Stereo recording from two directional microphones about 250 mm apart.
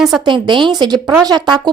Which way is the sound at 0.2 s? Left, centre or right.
Centre.